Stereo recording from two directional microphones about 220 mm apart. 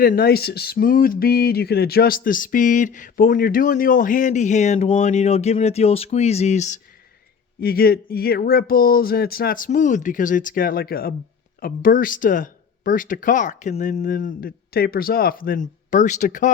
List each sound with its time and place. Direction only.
0.0 s speech: 40° left (ahead or behind)
7.6 s speech: 45° left (ahead or behind)